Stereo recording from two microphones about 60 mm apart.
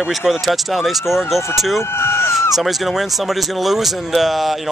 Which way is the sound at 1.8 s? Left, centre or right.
Left.